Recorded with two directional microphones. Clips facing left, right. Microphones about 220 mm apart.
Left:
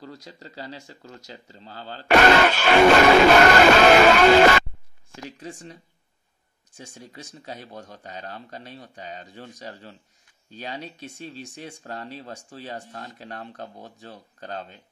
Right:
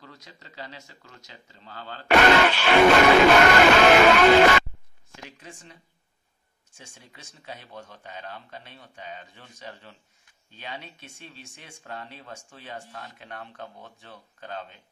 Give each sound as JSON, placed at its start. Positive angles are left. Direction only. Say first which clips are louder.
{"t": 0.0, "sound": "speech", "louder": "left 8 dB", "side_deg": 35}
{"t": 6.8, "sound": "speech", "louder": "left 8 dB", "side_deg": 40}